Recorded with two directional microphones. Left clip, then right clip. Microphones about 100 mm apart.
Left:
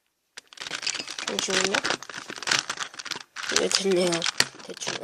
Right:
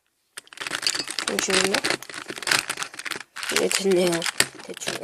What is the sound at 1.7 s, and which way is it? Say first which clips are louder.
Speech: right 2 dB; 25° right (ahead or behind).